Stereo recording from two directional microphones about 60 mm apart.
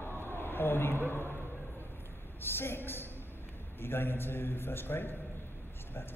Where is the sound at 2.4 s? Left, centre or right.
Left.